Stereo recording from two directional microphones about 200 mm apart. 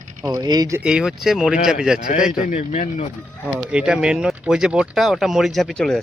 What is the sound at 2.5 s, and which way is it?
Speech, 35° left (ahead or behind).